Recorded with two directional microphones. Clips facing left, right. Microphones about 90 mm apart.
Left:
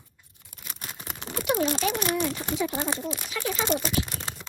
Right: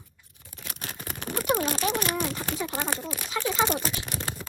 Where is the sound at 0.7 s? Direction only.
60° right (ahead or behind).